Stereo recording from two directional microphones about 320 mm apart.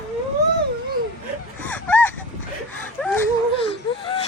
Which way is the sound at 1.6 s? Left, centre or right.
Centre.